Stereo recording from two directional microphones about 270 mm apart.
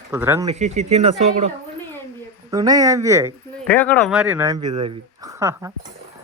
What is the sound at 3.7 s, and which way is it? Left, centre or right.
Speech, centre.